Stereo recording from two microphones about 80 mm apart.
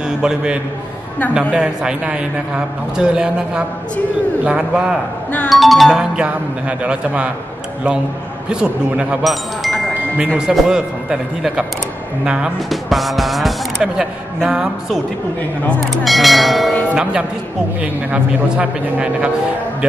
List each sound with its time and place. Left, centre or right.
0.2 s a man's voice: centre
5.5 s speech: centre
6.8 s a man's voice: centre
8.5 s a man's voice: centre
9.2 s speech: centre
10.1 s a man's voice: centre
16.0 s speech: centre
16.9 s a man's voice: centre